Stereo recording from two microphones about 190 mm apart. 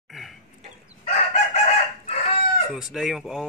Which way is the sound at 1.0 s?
35° left (ahead or behind).